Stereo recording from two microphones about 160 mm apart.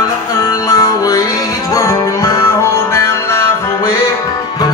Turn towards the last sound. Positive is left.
turn(degrees=15)  # may be behind; listen again after turning